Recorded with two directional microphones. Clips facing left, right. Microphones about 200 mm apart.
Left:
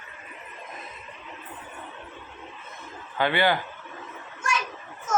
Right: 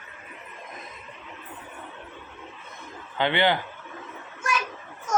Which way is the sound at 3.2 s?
20° right (ahead or behind).